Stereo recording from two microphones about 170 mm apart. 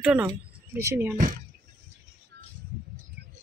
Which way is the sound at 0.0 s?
5° right (ahead or behind).